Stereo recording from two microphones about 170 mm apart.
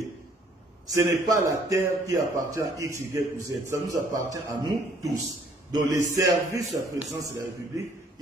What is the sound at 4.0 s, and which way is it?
Speech, 50° right (ahead or behind).